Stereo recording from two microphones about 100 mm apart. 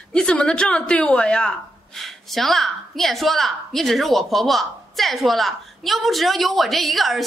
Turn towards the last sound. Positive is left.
turn(degrees=0)  # may be behind; listen again after turning